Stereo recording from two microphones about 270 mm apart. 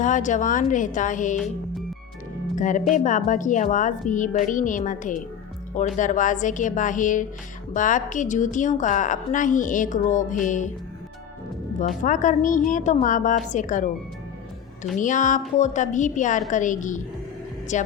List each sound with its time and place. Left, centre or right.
0.0 s a woman's voice: left
2.6 s a woman's voice: left
11.8 s a woman's voice: left
14.9 s a woman's voice: left